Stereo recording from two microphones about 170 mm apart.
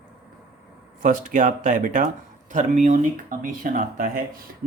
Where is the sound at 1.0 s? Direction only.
50° right (ahead or behind).